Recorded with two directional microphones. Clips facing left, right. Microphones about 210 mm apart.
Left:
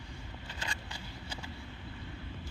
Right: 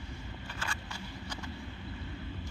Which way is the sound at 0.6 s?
15° left (ahead or behind).